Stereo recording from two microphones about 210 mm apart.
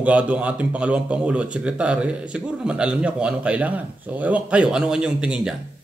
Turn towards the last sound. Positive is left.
turn(degrees=-5)  # may be behind; listen again after turning